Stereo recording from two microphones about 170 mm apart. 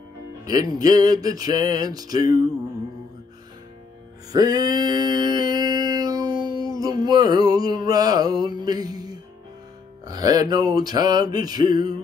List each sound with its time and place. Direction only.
0.5 s music: 20° right (ahead or behind)
4.3 s music: 25° right (ahead or behind)